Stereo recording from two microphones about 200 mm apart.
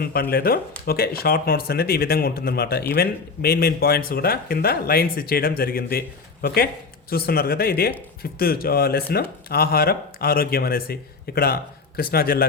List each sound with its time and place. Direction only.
0.0 s speech: 50° left (ahead or behind)